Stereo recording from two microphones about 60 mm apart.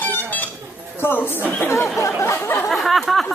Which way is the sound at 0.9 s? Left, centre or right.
Left.